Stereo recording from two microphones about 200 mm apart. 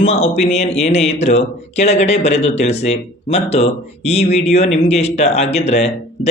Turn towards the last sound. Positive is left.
turn(degrees=35)  # may be behind; listen again after turning